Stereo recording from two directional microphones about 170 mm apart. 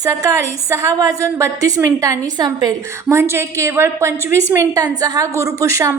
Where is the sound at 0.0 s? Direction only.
20° right (ahead or behind).